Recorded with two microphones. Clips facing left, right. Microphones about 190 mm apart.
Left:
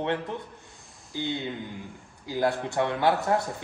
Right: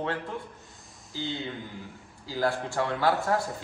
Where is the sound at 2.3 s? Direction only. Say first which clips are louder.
Left 2 dB; 20° left (ahead or behind).